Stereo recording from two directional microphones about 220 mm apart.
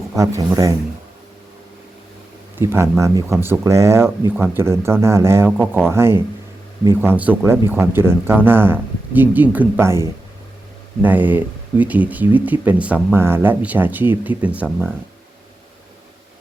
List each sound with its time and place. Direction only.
0.2 s speech: 15° right (ahead or behind)
2.6 s speech: 10° right (ahead or behind)
11.0 s speech: 10° right (ahead or behind)